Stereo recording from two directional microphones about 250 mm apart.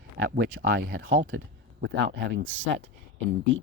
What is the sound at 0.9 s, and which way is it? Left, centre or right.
Speech, right.